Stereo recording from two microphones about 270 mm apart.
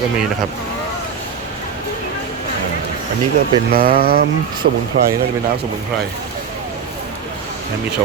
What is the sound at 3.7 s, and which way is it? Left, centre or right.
Speech, right.